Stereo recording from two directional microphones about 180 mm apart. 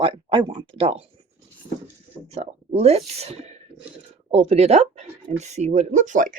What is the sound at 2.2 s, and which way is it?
Speech, 35° right (ahead or behind).